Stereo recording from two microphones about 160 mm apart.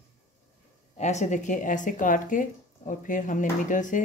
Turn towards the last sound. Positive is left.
turn(degrees=55)  # may be behind; listen again after turning